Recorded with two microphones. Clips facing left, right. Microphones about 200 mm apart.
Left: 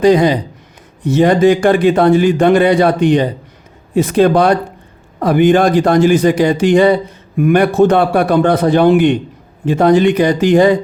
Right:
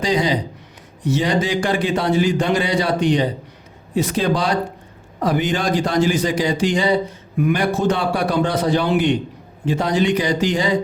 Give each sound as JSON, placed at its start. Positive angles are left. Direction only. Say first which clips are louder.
{"t": 0.0, "sound": "a man's voice", "louder": "left 9 dB", "side_deg": 55}